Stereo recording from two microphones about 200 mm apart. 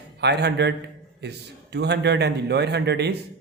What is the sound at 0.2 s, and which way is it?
A man's voice, 55° right (ahead or behind).